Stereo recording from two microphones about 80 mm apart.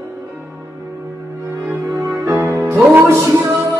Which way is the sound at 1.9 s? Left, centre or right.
Right.